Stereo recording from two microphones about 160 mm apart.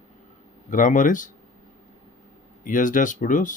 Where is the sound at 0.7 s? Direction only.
55° left (ahead or behind).